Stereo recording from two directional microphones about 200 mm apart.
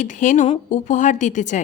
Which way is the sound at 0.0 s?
40° left (ahead or behind).